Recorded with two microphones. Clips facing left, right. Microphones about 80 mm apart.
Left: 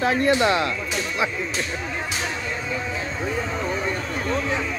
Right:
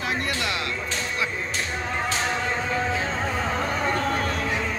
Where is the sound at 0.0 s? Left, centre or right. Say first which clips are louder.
Left 8 dB; left.